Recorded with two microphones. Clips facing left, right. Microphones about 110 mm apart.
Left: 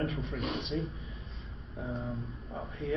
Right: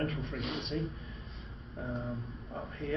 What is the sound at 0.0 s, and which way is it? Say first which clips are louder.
A man's voice: left 1 dB; centre (ahead or behind).